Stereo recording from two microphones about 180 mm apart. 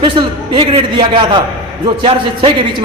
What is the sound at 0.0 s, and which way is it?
A man's voice, 30° right (ahead or behind).